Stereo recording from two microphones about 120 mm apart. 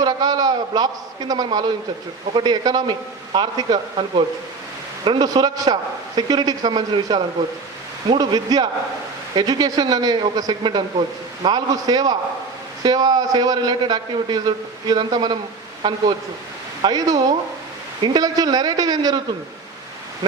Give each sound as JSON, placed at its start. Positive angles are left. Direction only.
{"t": 0.0, "sound": "a man's voice", "side_deg": -35}
{"t": 5.0, "sound": "a man's voice", "side_deg": -35}